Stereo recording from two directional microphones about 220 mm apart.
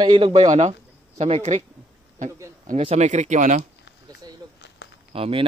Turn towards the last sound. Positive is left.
turn(degrees=-25)  # may be behind; listen again after turning